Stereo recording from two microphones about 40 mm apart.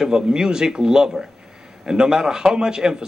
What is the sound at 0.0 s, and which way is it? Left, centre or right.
Speech, centre.